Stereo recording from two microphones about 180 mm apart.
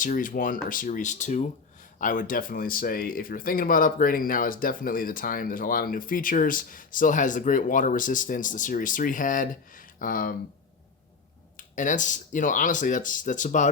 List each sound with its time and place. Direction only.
0.0 s speech: 50° left (ahead or behind)
11.5 s speech: 45° left (ahead or behind)